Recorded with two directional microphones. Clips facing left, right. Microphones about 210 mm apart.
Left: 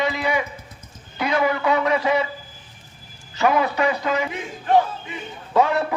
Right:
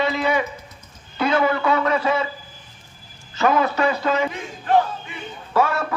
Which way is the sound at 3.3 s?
15° left (ahead or behind).